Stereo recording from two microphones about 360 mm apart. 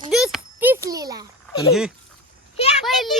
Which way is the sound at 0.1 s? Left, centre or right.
Centre.